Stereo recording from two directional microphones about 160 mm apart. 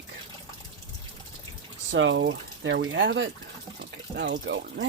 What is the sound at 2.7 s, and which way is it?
Speech, 90° right.